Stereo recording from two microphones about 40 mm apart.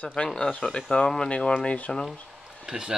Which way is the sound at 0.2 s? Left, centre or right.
Left.